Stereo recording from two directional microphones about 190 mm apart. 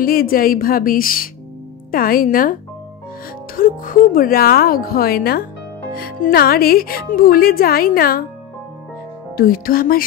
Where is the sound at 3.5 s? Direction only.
50° left (ahead or behind).